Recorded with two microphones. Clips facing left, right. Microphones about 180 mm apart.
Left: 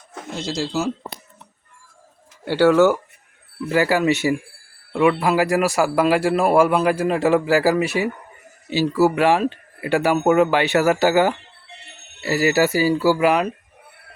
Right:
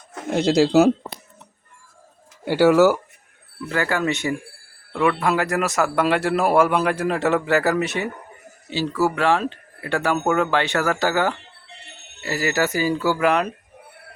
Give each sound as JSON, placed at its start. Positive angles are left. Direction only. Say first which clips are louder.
{"t": 0.3, "sound": "speech", "louder": "right 9 dB", "side_deg": -60}
{"t": 2.4, "sound": "speech", "louder": "even", "side_deg": -10}
{"t": 3.7, "sound": "a man's voice", "louder": "left 5 dB", "side_deg": 10}
{"t": 8.7, "sound": "speech", "louder": "left 4 dB", "side_deg": 15}